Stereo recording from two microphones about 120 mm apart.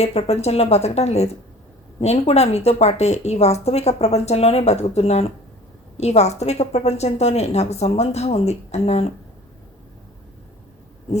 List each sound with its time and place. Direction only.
0.0 s a woman's voice: 55° left (ahead or behind)